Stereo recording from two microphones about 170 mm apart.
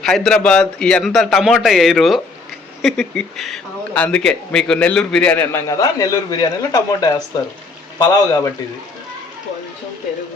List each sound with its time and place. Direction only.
0.0 s a man's voice: 5° left (ahead or behind); by 8.5 s 20° left (ahead or behind)